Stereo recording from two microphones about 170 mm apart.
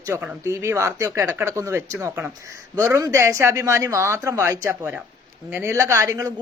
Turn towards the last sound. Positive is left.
turn(degrees=-20)  # may be behind; listen again after turning